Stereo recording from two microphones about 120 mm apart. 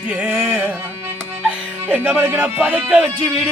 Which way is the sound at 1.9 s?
20° right (ahead or behind).